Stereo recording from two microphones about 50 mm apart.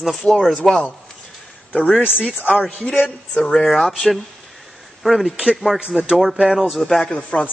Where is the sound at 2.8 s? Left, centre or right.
Left.